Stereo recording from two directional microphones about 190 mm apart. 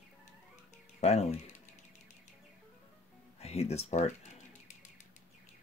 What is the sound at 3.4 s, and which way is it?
Music, 35° left (ahead or behind).